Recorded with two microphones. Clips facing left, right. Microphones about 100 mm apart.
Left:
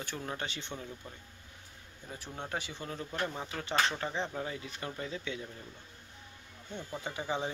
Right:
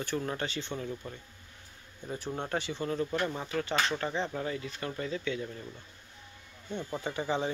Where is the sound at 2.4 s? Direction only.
5° left (ahead or behind).